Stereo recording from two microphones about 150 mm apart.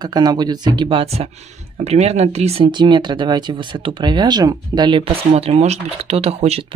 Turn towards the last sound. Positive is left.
turn(degrees=-45)  # may be behind; listen again after turning